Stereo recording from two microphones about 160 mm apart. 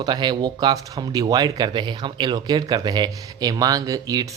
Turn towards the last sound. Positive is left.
turn(degrees=-25)  # may be behind; listen again after turning